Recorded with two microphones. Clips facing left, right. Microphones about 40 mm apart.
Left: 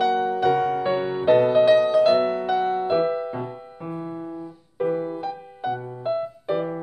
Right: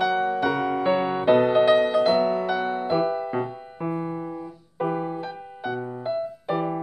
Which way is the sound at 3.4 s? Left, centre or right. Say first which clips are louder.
Right 3 dB; right.